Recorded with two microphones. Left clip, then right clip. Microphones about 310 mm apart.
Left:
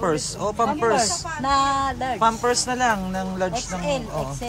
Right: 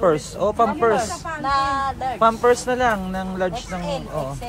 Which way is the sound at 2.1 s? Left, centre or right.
Centre.